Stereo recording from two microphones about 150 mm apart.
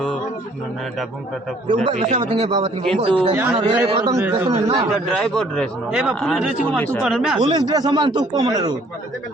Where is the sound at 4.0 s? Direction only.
20° right (ahead or behind).